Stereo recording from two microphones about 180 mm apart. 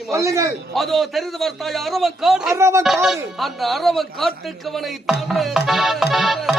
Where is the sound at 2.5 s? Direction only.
15° right (ahead or behind).